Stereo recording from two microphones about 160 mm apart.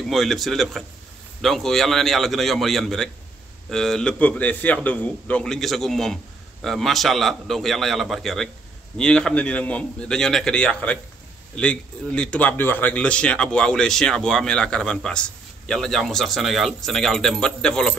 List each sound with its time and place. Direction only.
0.0 s a man's voice: centre (ahead or behind)